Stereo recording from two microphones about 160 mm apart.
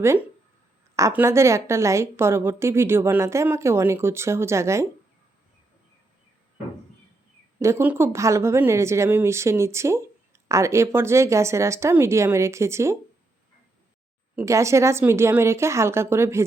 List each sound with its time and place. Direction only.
0.9 s a woman's voice: 15° right (ahead or behind)
7.6 s a woman's voice: 15° right (ahead or behind)
14.3 s a woman's voice: 20° right (ahead or behind)